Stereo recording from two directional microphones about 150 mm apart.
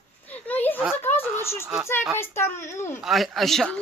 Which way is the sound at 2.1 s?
15° left (ahead or behind).